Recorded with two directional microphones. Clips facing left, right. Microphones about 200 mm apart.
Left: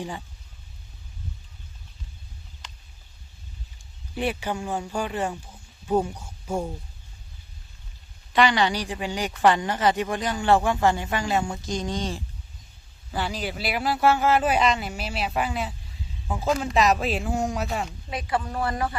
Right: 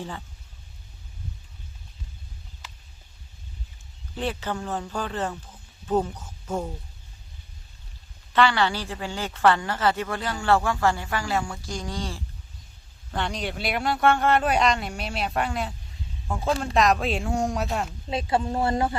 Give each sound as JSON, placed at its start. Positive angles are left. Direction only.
{"t": 2.6, "sound": "a sound", "side_deg": -5}
{"t": 4.1, "sound": "speech", "side_deg": 10}
{"t": 8.3, "sound": "a woman's voice", "side_deg": 15}
{"t": 13.1, "sound": "a man's voice", "side_deg": 5}
{"t": 18.1, "sound": "speech", "side_deg": -25}